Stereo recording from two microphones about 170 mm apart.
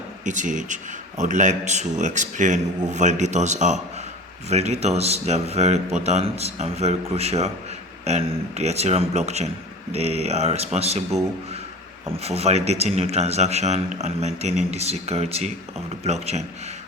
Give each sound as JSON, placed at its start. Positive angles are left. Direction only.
{"t": 0.3, "sound": "a man's voice", "side_deg": -45}
{"t": 12.1, "sound": "speech", "side_deg": -35}